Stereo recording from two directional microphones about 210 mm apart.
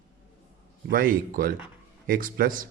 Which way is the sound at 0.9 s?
40° right (ahead or behind).